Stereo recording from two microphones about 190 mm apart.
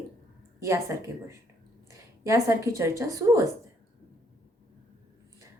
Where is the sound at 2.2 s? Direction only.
15° right (ahead or behind).